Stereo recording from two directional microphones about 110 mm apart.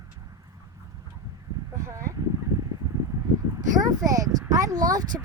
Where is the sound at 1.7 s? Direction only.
30° right (ahead or behind).